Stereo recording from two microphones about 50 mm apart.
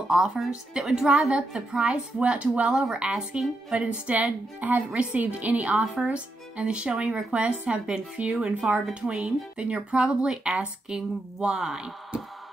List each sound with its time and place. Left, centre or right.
0.1 s a woman's voice: centre
2.1 s speech: right
4.1 s a woman's voice: right; by 12.2 s centre